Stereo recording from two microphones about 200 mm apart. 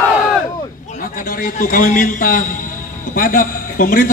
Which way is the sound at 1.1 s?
45° left (ahead or behind).